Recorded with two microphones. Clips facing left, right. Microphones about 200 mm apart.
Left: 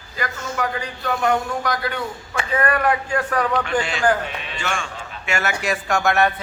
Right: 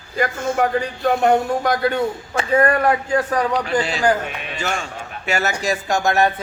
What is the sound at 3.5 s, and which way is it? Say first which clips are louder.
Speech: right 2 dB; 35° right (ahead or behind).